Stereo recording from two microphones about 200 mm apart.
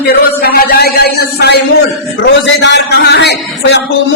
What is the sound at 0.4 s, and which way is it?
A man's voice, 50° left (ahead or behind).